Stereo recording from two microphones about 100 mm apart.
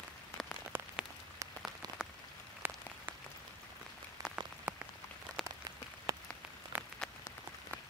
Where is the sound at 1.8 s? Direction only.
45° right (ahead or behind).